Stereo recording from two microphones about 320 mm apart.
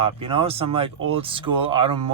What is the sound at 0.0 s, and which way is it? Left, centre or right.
Speech, centre.